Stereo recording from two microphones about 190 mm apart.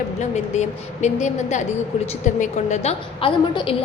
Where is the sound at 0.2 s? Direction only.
35° left (ahead or behind).